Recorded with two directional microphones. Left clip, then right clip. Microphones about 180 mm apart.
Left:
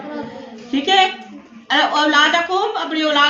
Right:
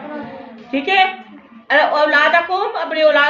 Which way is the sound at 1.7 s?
45° right (ahead or behind).